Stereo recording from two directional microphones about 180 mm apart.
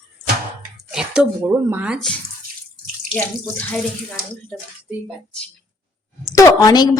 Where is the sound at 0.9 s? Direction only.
5° right (ahead or behind).